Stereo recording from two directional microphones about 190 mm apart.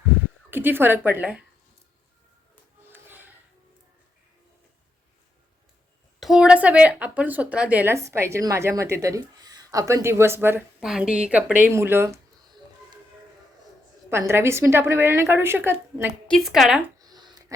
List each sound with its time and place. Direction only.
0.5 s speech: 10° right (ahead or behind)
2.9 s a sound: 10° right (ahead or behind)
6.1 s speech: centre (ahead or behind)
14.1 s speech: 15° right (ahead or behind)
16.2 s a woman's voice: centre (ahead or behind)
17.0 s a sound: 20° right (ahead or behind)